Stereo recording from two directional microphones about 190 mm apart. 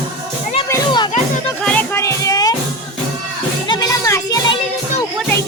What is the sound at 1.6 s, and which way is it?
Music, 5° left (ahead or behind).